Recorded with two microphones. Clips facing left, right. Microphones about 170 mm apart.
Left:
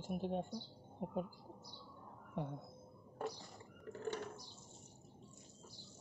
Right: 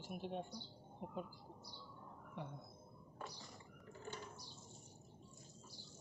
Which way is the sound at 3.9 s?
65° left (ahead or behind).